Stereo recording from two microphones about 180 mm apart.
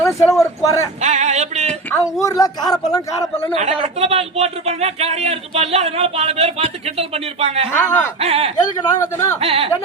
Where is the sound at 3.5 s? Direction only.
35° right (ahead or behind).